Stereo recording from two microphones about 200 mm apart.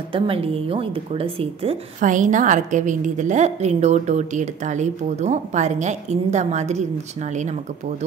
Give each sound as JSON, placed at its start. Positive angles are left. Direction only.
{"t": 0.1, "sound": "speech", "side_deg": -30}